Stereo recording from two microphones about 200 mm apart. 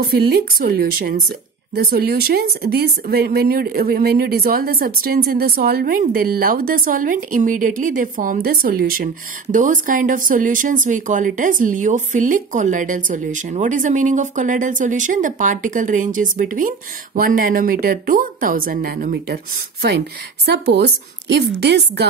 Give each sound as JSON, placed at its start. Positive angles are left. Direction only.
{"t": 0.0, "sound": "a woman's voice", "side_deg": -50}